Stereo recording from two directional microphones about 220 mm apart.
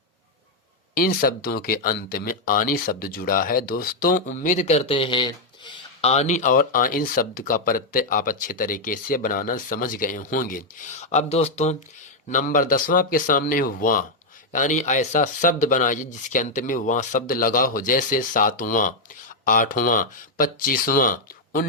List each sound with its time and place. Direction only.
0.9 s speech: 40° left (ahead or behind)